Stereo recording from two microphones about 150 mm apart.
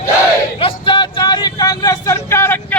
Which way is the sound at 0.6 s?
35° left (ahead or behind).